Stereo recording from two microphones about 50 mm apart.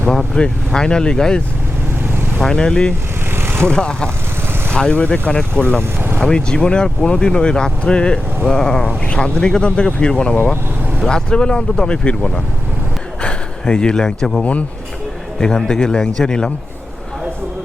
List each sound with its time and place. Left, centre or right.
0.1 s speech: centre
2.4 s speech: centre
3.3 s vehicle: right
3.7 s speech: centre